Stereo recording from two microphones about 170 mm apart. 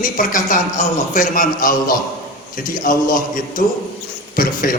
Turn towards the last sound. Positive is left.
turn(degrees=55)  # may be behind; listen again after turning